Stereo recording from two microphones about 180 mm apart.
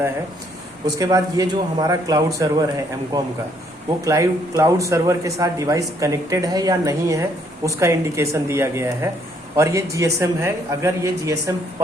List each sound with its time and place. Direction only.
0.9 s a man's voice: 20° right (ahead or behind)